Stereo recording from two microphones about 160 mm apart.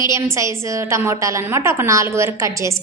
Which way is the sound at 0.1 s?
20° right (ahead or behind).